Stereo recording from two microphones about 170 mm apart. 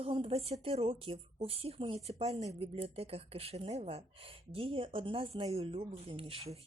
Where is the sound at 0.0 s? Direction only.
35° right (ahead or behind).